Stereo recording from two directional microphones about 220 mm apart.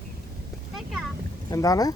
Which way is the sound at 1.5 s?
15° left (ahead or behind).